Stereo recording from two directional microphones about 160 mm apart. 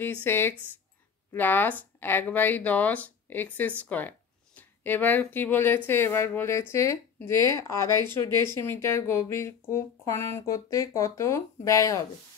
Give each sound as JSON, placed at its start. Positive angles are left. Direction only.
{"t": 0.0, "sound": "speech", "side_deg": 15}